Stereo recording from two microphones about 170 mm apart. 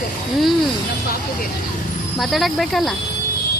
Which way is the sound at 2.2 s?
Centre (ahead or behind).